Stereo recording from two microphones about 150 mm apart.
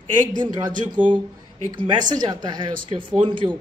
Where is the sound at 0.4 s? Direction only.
30° right (ahead or behind).